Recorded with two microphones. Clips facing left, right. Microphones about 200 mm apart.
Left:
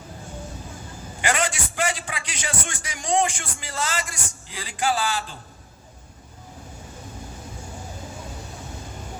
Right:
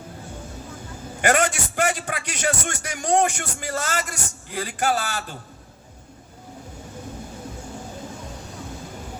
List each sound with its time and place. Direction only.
1.2 s a man's voice: 55° right (ahead or behind)